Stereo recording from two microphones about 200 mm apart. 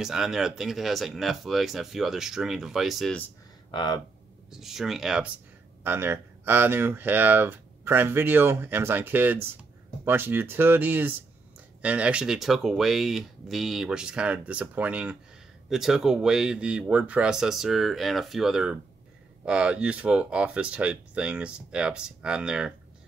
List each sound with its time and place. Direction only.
0.0 s speech: centre (ahead or behind)
3.7 s speech: 20° left (ahead or behind)
4.5 s speech: centre (ahead or behind)